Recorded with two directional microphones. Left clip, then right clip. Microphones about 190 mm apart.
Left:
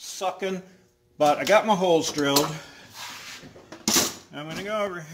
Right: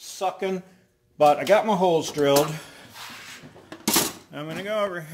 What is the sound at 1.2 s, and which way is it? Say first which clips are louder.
Mantra: right 2 dB; 25° right (ahead or behind).